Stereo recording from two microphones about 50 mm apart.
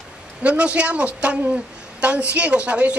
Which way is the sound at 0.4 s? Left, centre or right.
Right.